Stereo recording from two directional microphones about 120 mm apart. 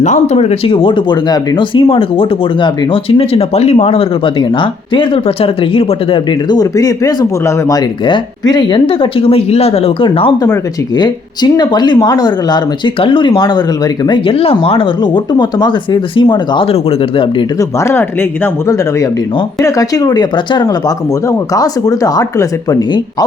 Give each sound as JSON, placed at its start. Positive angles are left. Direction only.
{"t": 0.0, "sound": "speech", "side_deg": 80}
{"t": 6.5, "sound": "speech", "side_deg": 30}
{"t": 8.9, "sound": "speech", "side_deg": 50}
{"t": 10.4, "sound": "speech", "side_deg": 35}
{"t": 14.3, "sound": "speech", "side_deg": 50}
{"t": 17.6, "sound": "speech", "side_deg": 25}